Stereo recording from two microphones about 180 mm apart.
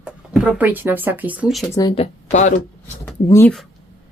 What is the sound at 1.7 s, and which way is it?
Speech, 25° left (ahead or behind).